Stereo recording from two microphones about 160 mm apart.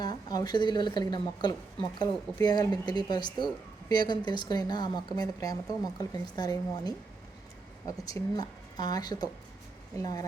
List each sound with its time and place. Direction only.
0.0 s a woman's voice: 25° left (ahead or behind)